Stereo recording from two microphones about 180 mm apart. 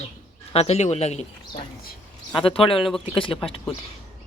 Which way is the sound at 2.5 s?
30° left (ahead or behind).